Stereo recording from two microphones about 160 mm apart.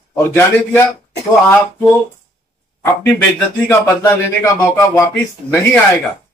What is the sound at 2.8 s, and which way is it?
Speech, 15° left (ahead or behind).